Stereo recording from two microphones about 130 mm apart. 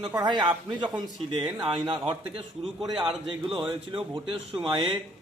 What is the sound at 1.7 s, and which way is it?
Speech, 40° right (ahead or behind).